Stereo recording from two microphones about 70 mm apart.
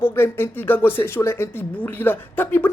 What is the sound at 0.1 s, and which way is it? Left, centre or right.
Speech, left.